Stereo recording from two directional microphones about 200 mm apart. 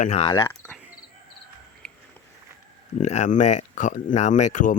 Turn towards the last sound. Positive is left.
turn(degrees=35)  # may be behind; listen again after turning